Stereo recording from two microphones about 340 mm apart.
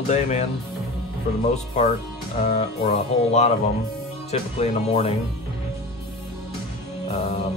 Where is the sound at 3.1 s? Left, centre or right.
Centre.